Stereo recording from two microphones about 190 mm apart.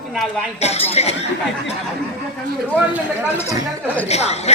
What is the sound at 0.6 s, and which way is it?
Speech, 35° left (ahead or behind).